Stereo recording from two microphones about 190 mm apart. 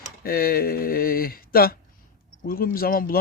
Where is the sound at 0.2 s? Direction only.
50° left (ahead or behind).